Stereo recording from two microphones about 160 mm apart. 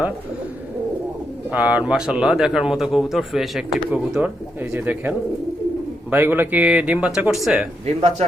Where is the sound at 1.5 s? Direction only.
5° right (ahead or behind).